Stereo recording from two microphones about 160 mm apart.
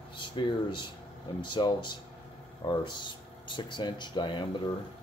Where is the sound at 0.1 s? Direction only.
30° left (ahead or behind).